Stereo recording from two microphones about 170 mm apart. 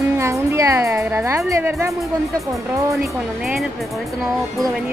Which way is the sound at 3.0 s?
Centre (ahead or behind).